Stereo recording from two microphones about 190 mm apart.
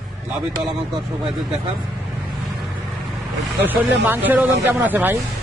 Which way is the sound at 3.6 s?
10° right (ahead or behind).